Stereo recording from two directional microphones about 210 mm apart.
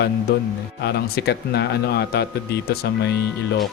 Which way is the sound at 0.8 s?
50° left (ahead or behind).